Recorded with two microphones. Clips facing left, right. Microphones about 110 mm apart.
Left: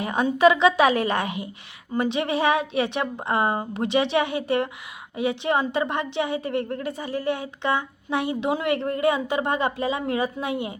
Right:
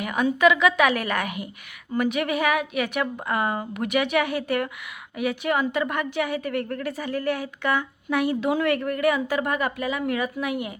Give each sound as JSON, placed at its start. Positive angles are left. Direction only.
{"t": 0.0, "sound": "a woman's voice", "side_deg": 30}